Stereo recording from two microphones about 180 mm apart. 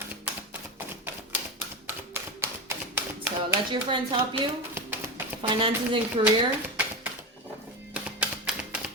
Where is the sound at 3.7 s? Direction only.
25° right (ahead or behind).